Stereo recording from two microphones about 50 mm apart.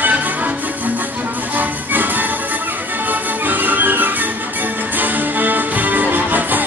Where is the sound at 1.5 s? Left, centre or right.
Right.